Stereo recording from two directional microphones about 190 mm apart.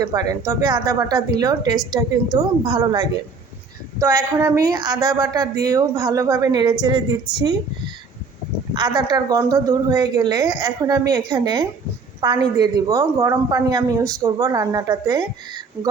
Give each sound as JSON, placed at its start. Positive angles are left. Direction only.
{"t": 0.1, "sound": "a woman's voice", "side_deg": -20}
{"t": 4.3, "sound": "a woman's voice", "side_deg": -15}
{"t": 8.7, "sound": "a woman's voice", "side_deg": -20}